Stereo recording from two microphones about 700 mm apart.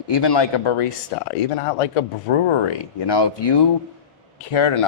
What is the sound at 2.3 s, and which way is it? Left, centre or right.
Speech, left.